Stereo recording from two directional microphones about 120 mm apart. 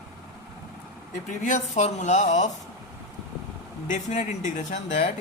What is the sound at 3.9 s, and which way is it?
Speech, 90° left.